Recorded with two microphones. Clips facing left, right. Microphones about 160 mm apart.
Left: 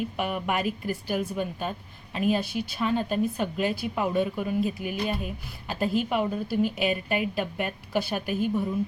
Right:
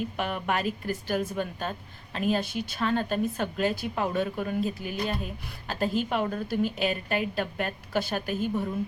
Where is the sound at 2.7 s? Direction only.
5° left (ahead or behind).